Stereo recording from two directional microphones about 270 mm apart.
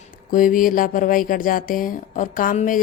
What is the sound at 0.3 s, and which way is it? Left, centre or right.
Speech, left.